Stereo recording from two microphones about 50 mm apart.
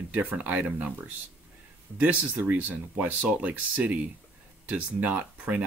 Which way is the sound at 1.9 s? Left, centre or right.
Right.